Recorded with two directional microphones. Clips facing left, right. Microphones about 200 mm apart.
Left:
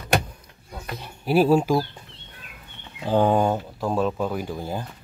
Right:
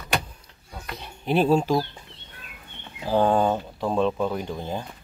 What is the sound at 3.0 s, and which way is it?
Speech, 15° left (ahead or behind).